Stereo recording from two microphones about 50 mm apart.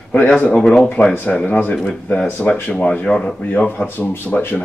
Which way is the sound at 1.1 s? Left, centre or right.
Left.